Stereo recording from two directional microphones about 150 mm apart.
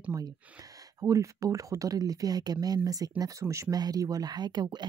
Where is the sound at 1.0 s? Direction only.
20° right (ahead or behind).